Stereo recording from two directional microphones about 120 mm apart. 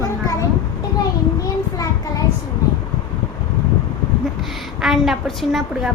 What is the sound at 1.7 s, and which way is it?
Child singing, 30° left (ahead or behind).